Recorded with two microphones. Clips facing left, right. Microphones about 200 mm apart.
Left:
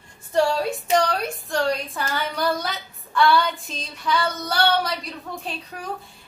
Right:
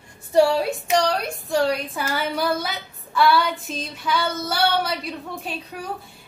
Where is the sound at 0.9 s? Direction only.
Centre (ahead or behind).